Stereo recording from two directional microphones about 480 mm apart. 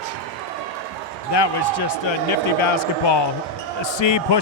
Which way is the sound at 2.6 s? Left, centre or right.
Left.